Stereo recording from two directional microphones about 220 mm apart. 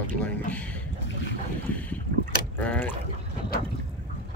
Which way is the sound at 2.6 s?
5° left (ahead or behind).